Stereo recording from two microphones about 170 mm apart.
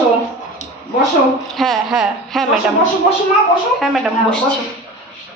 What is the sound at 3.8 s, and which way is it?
Speech, centre (ahead or behind).